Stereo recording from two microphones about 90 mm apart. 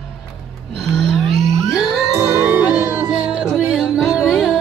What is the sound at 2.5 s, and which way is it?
Music, 15° right (ahead or behind).